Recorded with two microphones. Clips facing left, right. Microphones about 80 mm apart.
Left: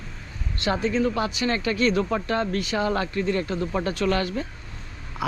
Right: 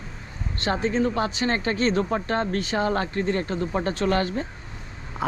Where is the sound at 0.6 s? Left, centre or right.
Right.